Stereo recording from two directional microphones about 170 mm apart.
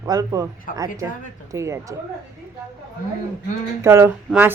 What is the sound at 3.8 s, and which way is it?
Speech, 15° right (ahead or behind).